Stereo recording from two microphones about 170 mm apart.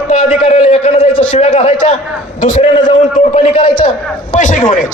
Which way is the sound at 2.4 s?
50° left (ahead or behind).